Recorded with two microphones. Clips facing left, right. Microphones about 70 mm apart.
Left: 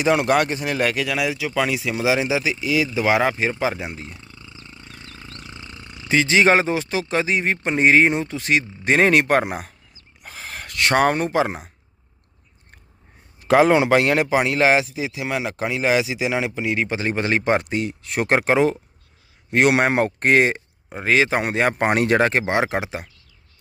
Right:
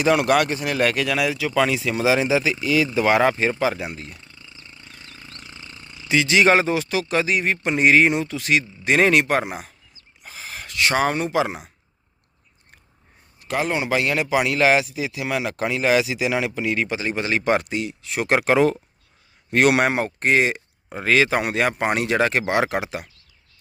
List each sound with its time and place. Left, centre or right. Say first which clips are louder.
0.0 s speech: even; left
0.8 s speech: right 2 dB; centre
3.6 s speech: right 1 dB; left
4.8 s a sound: left 3 dB; left
5.7 s speech: left 1 dB; left
13.9 s speech: left 3 dB; left
17.0 s speech: left 2 dB; left
17.7 s speech: left 2 dB; left
18.3 s speech: right 1 dB; left
19.9 s speech: left 3 dB; left
21.0 s speech: even; left